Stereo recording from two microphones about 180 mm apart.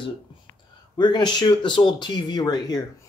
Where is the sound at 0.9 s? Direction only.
25° left (ahead or behind).